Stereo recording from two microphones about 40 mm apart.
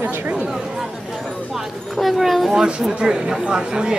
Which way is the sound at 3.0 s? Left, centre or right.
Centre.